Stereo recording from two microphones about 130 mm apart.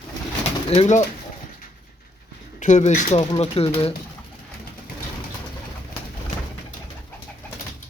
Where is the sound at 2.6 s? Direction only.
65° left (ahead or behind); by 3.9 s 50° left (ahead or behind).